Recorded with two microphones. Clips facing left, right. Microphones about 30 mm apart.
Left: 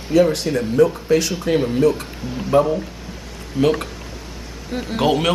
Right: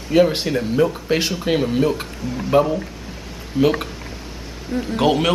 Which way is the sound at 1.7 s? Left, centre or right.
Centre.